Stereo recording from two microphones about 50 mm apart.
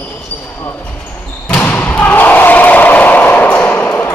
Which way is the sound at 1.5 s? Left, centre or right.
Left.